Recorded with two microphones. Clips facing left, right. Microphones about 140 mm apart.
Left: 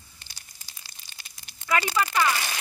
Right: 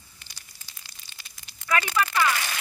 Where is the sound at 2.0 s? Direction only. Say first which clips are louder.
Even; 15° left (ahead or behind).